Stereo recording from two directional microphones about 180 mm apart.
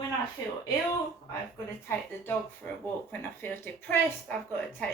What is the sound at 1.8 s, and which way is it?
A woman's voice, 10° left (ahead or behind).